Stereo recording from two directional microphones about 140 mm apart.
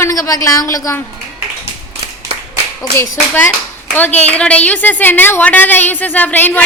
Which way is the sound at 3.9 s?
10° left (ahead or behind).